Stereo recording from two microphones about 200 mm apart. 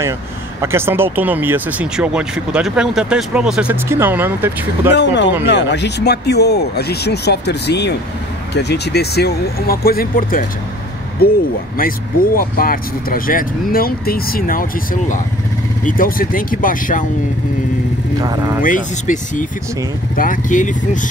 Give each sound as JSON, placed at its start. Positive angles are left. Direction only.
{"t": 0.6, "sound": "speech", "side_deg": -10}
{"t": 4.9, "sound": "speech", "side_deg": 60}
{"t": 18.2, "sound": "speech", "side_deg": -20}
{"t": 18.6, "sound": "speech", "side_deg": 40}